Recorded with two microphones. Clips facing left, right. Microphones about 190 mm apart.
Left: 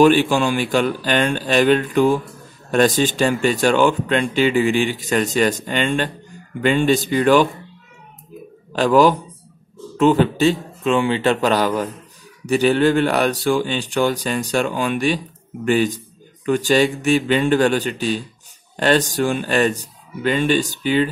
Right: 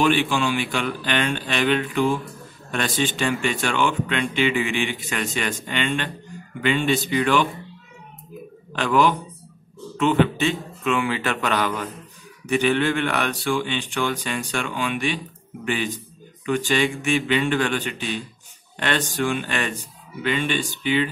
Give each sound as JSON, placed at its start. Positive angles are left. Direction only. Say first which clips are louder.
{"t": 0.0, "sound": "speech", "louder": "left 6 dB", "side_deg": 40}
{"t": 8.7, "sound": "speech", "louder": "left 6 dB", "side_deg": 35}